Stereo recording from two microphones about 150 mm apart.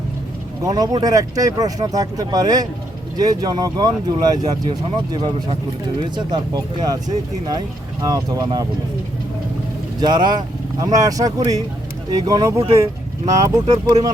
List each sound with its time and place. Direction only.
0.6 s speech: 25° right (ahead or behind)
6.1 s speech: 25° right (ahead or behind)
8.0 s speech: 25° right (ahead or behind)
10.0 s speech: 30° right (ahead or behind)